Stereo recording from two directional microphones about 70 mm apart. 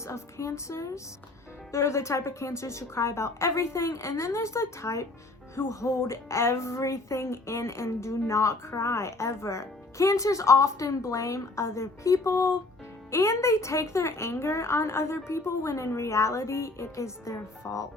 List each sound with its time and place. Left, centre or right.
0.1 s a woman's voice: left